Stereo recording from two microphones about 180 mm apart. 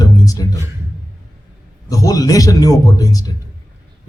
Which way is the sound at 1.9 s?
20° left (ahead or behind).